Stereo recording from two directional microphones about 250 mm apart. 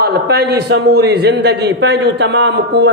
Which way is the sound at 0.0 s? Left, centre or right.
Right.